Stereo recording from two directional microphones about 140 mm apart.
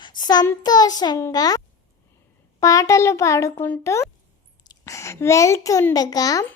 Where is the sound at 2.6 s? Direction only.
25° left (ahead or behind).